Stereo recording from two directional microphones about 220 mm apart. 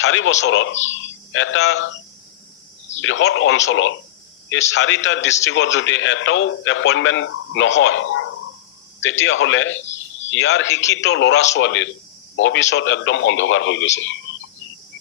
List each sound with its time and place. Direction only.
0.0 s a man's voice: 60° left (ahead or behind)
3.0 s a man's voice: 60° left (ahead or behind)